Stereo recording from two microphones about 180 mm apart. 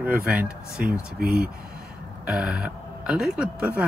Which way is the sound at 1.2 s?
55° right (ahead or behind).